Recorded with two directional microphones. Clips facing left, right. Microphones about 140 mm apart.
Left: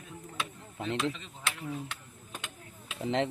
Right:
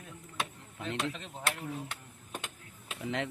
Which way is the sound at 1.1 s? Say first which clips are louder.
Right 3 dB; 55° right (ahead or behind).